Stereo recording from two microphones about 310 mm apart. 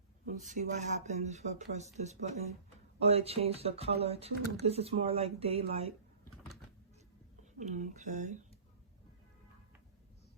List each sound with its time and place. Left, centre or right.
0.3 s speech: right
7.6 s speech: right